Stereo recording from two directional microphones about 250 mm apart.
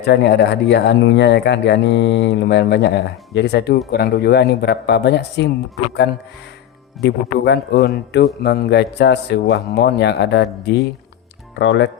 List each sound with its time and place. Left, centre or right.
0.0 s speech: left
7.0 s a man's voice: left